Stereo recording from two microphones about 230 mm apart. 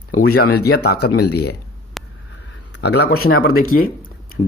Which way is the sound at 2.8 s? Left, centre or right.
Left.